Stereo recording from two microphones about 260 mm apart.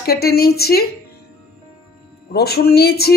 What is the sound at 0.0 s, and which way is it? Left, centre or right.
Speech, left.